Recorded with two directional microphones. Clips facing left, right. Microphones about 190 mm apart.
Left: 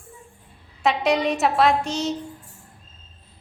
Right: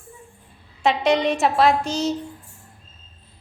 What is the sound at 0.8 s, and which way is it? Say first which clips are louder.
A woman's voice: right 2 dB; centre (ahead or behind).